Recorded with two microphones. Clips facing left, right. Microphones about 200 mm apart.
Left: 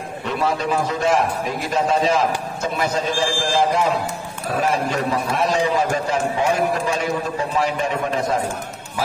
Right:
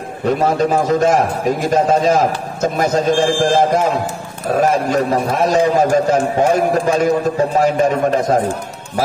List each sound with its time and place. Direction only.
0.2 s a man's voice: 45° right (ahead or behind)